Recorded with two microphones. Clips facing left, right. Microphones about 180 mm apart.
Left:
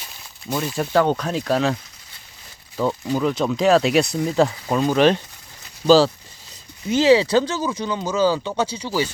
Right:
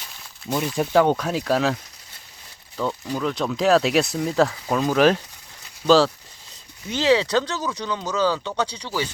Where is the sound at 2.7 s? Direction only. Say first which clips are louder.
Left 4 dB; 10° left (ahead or behind).